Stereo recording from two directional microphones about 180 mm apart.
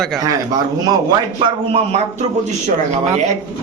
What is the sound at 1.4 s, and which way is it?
Speech, 35° right (ahead or behind).